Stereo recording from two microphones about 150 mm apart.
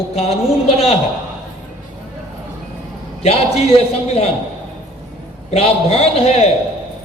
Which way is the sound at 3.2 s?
40° left (ahead or behind).